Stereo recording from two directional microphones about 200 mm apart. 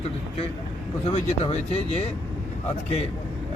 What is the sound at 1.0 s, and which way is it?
Speech, 30° left (ahead or behind).